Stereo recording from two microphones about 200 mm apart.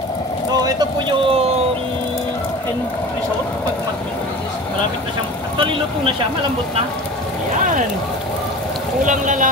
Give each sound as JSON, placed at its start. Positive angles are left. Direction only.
{"t": 0.7, "sound": "vehicle", "side_deg": -20}
{"t": 5.6, "sound": "vehicle", "side_deg": -25}
{"t": 9.0, "sound": "speech", "side_deg": -40}